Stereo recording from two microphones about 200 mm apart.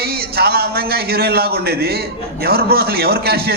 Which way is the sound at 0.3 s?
50° right (ahead or behind).